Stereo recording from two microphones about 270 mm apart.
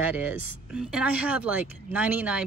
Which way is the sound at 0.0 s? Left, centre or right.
Centre.